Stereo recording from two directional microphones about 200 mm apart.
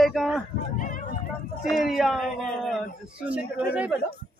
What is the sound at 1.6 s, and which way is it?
A woman's voice, centre (ahead or behind).